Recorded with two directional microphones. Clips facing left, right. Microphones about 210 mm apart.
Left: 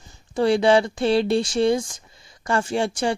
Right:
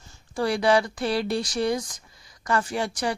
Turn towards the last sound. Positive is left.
turn(degrees=25)  # may be behind; listen again after turning